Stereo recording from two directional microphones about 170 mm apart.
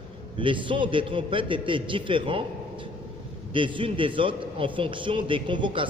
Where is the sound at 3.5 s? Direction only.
30° right (ahead or behind).